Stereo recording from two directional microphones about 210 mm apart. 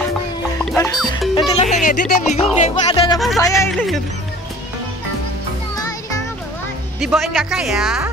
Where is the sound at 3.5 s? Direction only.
Centre (ahead or behind).